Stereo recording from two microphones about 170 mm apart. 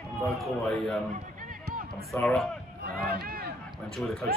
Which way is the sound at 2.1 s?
5° left (ahead or behind).